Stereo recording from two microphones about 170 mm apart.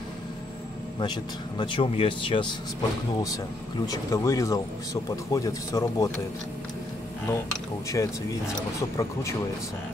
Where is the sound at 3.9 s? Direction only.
15° left (ahead or behind).